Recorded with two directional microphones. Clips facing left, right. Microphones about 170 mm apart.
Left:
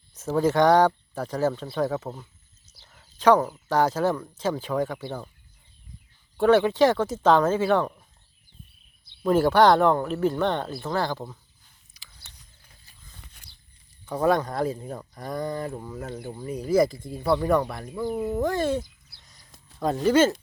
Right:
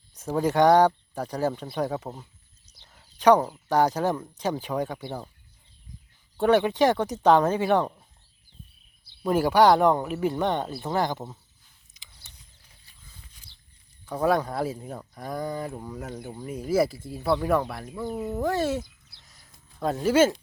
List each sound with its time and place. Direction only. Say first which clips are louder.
0.1 s speech: left 2 dB; 15° right (ahead or behind)
3.2 s speech: even; 15° right (ahead or behind)
6.3 s speech: left 2 dB; 15° right (ahead or behind)
9.2 s speech: left 1 dB; 10° right (ahead or behind)
11.9 s mechanisms: left 1 dB; 20° right (ahead or behind)
13.2 s a sound: left 3 dB; 70° left (ahead or behind)
14.0 s speech: left 1 dB; centre (ahead or behind)
18.1 s speech: left 3 dB; 15° left (ahead or behind)
18.3 s speech: right 1 dB; 5° right (ahead or behind)
19.1 s a sound: left 1 dB; centre (ahead or behind)
20.1 s speech: left 1 dB; 10° right (ahead or behind)